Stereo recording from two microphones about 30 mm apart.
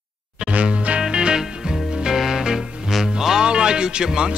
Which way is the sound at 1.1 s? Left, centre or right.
Right.